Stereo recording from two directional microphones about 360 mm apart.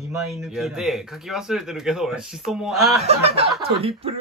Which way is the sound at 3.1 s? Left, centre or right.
Centre.